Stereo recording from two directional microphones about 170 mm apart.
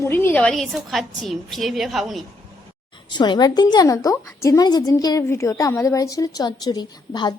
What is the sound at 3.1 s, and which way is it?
A woman's voice, 25° left (ahead or behind).